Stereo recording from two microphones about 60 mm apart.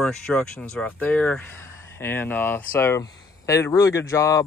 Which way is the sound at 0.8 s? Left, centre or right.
Left.